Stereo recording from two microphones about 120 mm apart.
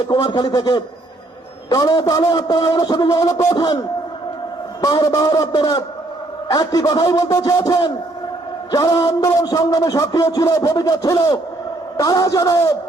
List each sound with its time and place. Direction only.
0.1 s a man's voice: 35° left (ahead or behind)
4.8 s a man's voice: 30° left (ahead or behind)